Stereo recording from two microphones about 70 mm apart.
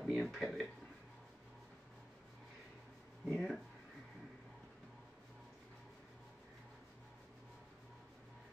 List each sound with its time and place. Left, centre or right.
0.0 s speech: centre
3.3 s speech: centre